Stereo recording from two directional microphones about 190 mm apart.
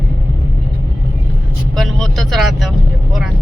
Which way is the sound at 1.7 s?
Centre (ahead or behind).